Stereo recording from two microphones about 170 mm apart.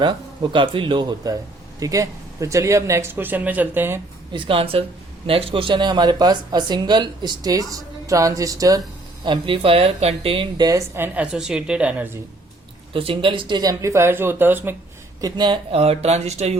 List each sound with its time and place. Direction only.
0.0 s a woman's voice: 30° right (ahead or behind); by 4.0 s 10° right (ahead or behind)
4.3 s a woman's voice: 30° right (ahead or behind); by 12.2 s 10° right (ahead or behind)
12.9 s a woman's voice: 30° right (ahead or behind); by 14.8 s 10° right (ahead or behind)
15.2 s speech: 25° right (ahead or behind)